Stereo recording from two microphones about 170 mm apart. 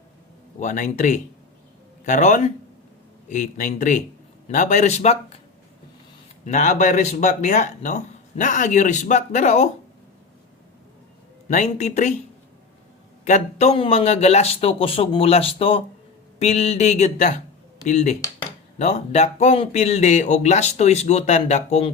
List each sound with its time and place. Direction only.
0.6 s speech: 45° left (ahead or behind)
6.4 s speech: 45° left (ahead or behind)
11.4 s speech: 45° left (ahead or behind)
13.2 s speech: 40° left (ahead or behind)